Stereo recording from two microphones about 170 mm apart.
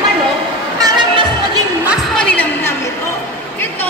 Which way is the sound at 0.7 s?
20° right (ahead or behind).